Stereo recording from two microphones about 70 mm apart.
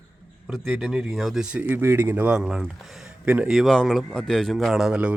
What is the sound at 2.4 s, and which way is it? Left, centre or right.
Speech, centre.